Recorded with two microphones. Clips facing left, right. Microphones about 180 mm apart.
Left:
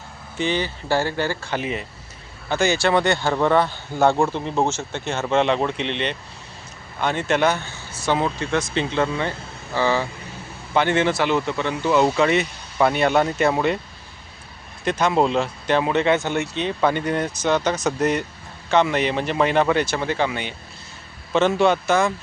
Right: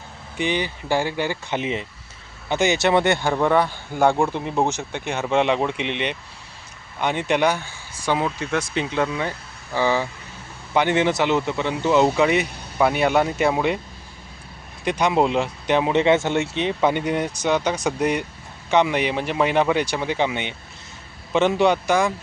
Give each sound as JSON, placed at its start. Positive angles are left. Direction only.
{"t": 0.3, "sound": "speech", "side_deg": -15}
{"t": 14.8, "sound": "speech", "side_deg": -15}